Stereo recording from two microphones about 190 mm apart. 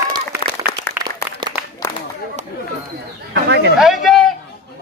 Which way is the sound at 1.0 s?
10° right (ahead or behind).